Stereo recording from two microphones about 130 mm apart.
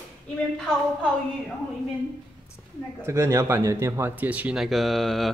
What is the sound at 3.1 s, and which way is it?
Speech, 20° right (ahead or behind).